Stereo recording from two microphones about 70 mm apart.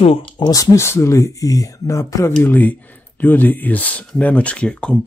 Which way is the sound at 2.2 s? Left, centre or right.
Left.